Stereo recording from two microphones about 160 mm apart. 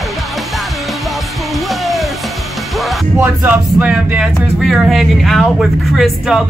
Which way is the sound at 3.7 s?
10° right (ahead or behind).